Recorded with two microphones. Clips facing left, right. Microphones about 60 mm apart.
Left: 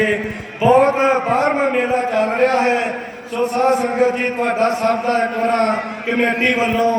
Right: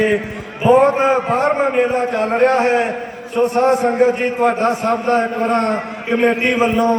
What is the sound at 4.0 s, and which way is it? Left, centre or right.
A man's voice, centre.